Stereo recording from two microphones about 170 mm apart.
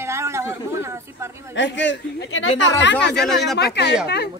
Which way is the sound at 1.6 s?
90° left.